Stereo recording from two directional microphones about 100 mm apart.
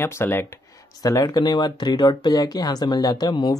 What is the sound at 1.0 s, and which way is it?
Speech, 35° left (ahead or behind).